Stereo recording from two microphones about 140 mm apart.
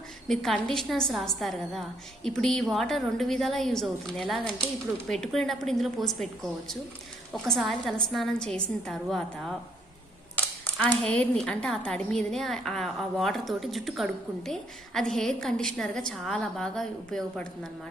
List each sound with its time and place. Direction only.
0.3 s a woman's voice: 5° left (ahead or behind)
7.4 s a woman's voice: centre (ahead or behind)